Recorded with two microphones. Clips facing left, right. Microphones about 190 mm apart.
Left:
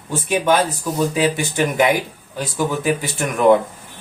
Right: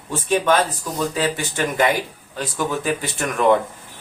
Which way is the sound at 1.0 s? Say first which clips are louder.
Left 4 dB; 15° left (ahead or behind).